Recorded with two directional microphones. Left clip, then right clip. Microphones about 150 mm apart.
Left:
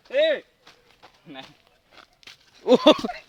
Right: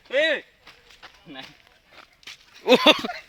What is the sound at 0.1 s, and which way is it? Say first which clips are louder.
Whip: left 1 dB; 50° right (ahead or behind).